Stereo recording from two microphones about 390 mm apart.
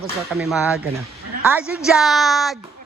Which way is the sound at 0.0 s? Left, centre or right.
Centre.